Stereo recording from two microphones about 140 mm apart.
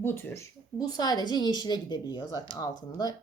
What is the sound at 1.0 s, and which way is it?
A woman's voice, 30° left (ahead or behind).